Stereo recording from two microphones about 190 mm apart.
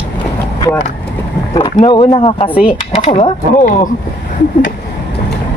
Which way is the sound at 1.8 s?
25° left (ahead or behind).